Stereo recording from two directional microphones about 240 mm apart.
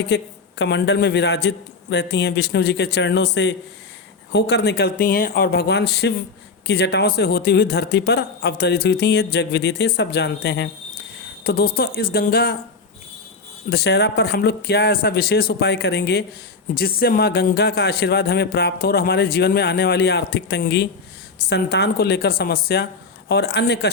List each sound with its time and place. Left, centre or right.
0.1 s a man's voice: left
13.7 s a man's voice: left